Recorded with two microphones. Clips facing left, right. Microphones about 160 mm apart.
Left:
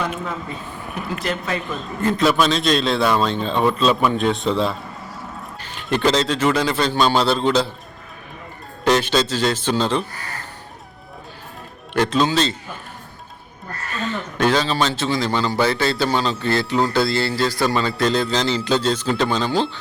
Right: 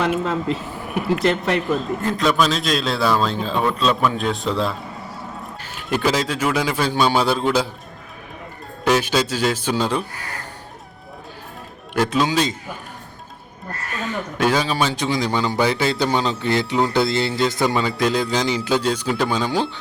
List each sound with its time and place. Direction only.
0.3 s speech: 90° right
1.2 s speech: 75° right (ahead or behind)
2.0 s a man's voice: centre (ahead or behind)
8.8 s a man's voice: 10° right (ahead or behind)
11.9 s a man's voice: 10° right (ahead or behind)
14.0 s a man's voice: 10° right (ahead or behind)